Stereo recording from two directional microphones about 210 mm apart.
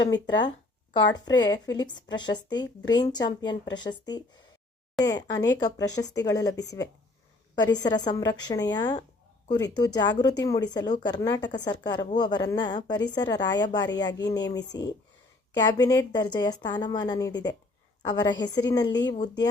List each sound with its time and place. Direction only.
1.4 s a woman's voice: 20° left (ahead or behind)